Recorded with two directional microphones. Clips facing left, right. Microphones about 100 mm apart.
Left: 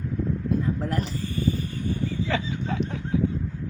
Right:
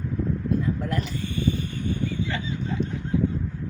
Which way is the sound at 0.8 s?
35° left (ahead or behind).